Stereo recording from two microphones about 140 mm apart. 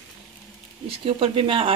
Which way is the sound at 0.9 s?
40° right (ahead or behind).